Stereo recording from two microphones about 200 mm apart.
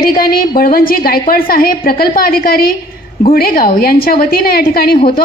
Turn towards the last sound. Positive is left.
turn(degrees=50)  # may be behind; listen again after turning